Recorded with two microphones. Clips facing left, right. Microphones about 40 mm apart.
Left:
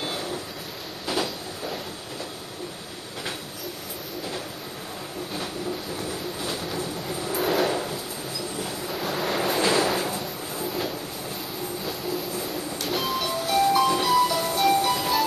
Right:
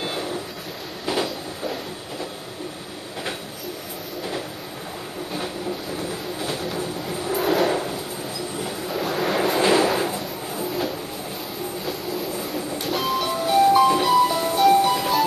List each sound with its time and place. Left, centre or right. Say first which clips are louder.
0.0 s vehicle: right 3 dB; centre
1.0 s train: right 3 dB; centre
6.4 s train: right 4 dB; centre
9.6 s a sound: right 4 dB; centre
11.8 s train: right 2 dB; centre
13.3 s music: right 5 dB; centre